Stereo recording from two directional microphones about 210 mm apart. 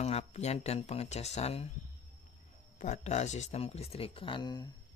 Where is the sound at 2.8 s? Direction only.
35° left (ahead or behind).